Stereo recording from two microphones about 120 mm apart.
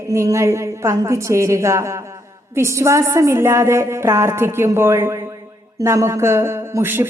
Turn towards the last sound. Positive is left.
turn(degrees=-20)  # may be behind; listen again after turning